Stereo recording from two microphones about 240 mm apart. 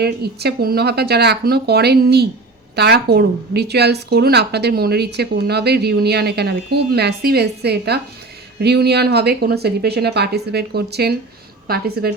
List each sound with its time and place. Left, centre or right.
0.0 s a woman's voice: right